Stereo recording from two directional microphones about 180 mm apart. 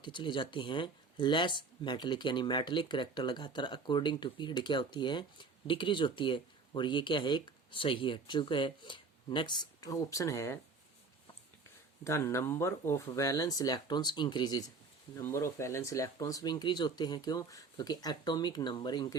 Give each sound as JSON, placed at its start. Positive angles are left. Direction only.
{"t": 0.0, "sound": "speech", "side_deg": 25}
{"t": 12.0, "sound": "speech", "side_deg": 15}